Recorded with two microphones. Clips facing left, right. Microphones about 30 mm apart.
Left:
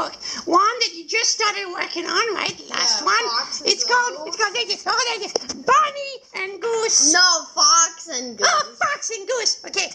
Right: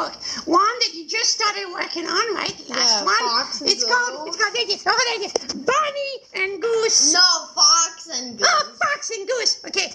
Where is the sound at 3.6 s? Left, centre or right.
Centre.